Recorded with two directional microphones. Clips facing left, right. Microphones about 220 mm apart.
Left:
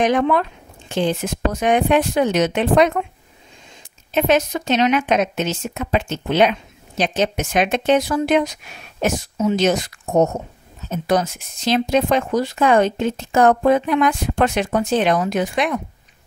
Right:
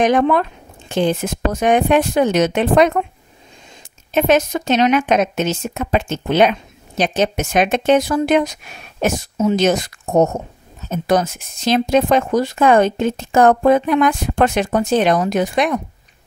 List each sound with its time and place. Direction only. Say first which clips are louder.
0.0 s speech: right 2 dB; 45° right (ahead or behind)
4.1 s speech: right 2 dB; 45° right (ahead or behind)